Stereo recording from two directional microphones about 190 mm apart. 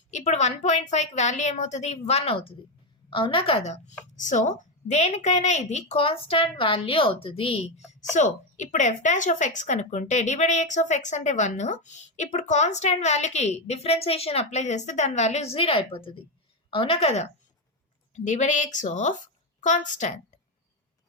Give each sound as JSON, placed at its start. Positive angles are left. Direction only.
{"t": 0.1, "sound": "a woman's voice", "side_deg": 40}